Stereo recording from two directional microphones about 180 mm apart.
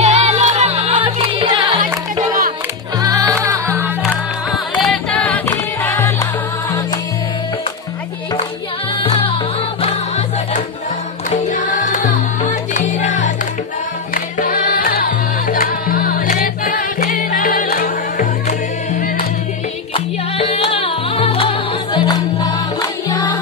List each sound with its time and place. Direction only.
0.0 s music: 40° right (ahead or behind)
3.0 s music: 20° right (ahead or behind)
4.0 s music: centre (ahead or behind)
9.0 s music: 30° left (ahead or behind)
11.2 s music: 45° left (ahead or behind)
19.9 s music: 35° left (ahead or behind)